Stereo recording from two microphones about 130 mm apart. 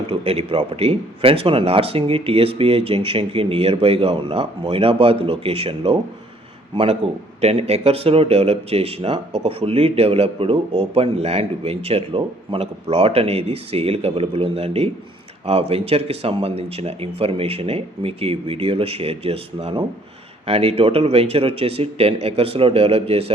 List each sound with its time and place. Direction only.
0.1 s speech: 45° right (ahead or behind)
7.0 s speech: 50° right (ahead or behind)